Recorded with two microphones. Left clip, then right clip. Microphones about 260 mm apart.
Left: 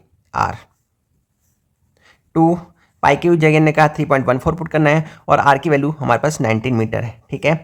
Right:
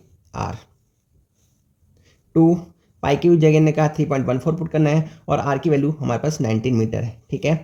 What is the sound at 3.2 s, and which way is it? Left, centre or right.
Speech, centre.